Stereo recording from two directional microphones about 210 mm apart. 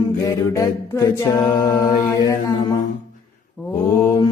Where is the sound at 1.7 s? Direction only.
15° left (ahead or behind).